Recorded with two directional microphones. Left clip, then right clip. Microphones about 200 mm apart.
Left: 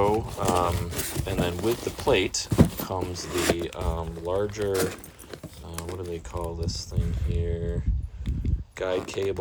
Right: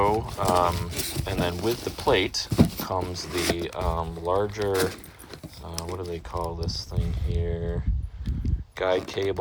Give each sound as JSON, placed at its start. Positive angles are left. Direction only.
{"t": 0.0, "sound": "speech", "side_deg": 15}
{"t": 2.5, "sound": "a sound", "side_deg": 5}
{"t": 2.8, "sound": "speech", "side_deg": 15}
{"t": 3.5, "sound": "speech", "side_deg": 5}
{"t": 5.7, "sound": "typing", "side_deg": 0}
{"t": 6.1, "sound": "speech", "side_deg": 5}
{"t": 8.8, "sound": "speech", "side_deg": 5}